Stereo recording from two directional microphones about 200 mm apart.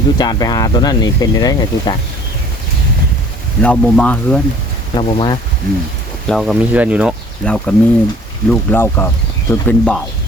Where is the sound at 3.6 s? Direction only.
5° left (ahead or behind).